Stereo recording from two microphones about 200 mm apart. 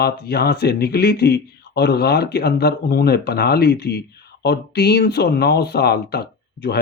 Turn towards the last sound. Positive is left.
turn(degrees=55)  # may be behind; listen again after turning